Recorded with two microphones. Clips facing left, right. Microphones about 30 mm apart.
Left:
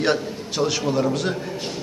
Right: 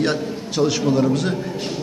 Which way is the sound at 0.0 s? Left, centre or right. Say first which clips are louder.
Even; centre.